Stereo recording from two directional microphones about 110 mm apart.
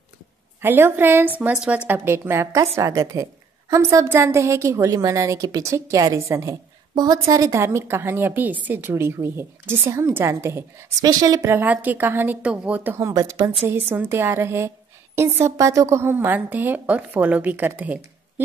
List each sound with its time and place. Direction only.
0.6 s a woman's voice: 20° right (ahead or behind)
1.9 s a woman's voice: 20° right (ahead or behind)
11.5 s a woman's voice: 15° right (ahead or behind); by 13.5 s 35° right (ahead or behind)
13.7 s a woman's voice: 20° right (ahead or behind)